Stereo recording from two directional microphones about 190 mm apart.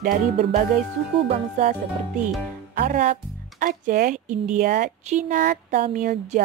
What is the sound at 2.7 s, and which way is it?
Speech, 45° right (ahead or behind).